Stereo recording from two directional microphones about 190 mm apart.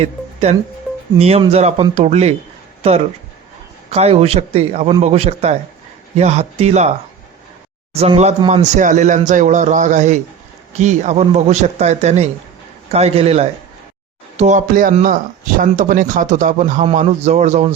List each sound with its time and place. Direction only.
0.0 s speech: 35° right (ahead or behind)
3.8 s speech: 35° right (ahead or behind)
7.9 s speech: 30° right (ahead or behind)